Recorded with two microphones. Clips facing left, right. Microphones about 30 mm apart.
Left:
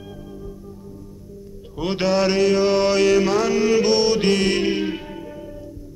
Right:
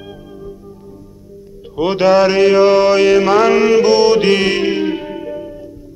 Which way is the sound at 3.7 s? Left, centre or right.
Right.